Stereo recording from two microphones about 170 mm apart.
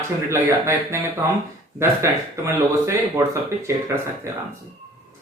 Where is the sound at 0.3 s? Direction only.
15° right (ahead or behind).